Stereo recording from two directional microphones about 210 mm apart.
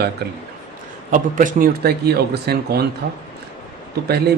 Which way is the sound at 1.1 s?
40° right (ahead or behind).